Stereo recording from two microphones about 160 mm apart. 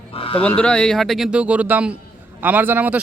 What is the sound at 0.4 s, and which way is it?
Speech, 5° left (ahead or behind).